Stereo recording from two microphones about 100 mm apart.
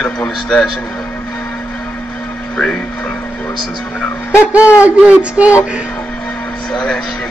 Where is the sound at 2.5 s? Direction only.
10° left (ahead or behind).